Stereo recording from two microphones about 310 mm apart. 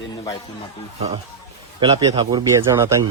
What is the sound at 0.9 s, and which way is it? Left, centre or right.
Speech, centre.